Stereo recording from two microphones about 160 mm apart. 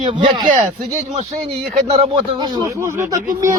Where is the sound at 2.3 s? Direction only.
20° right (ahead or behind).